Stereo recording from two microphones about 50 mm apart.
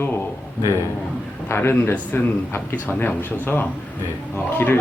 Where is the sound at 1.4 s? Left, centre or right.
Left.